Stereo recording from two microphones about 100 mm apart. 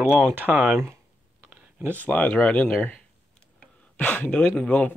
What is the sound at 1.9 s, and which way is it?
A man's voice, 15° left (ahead or behind).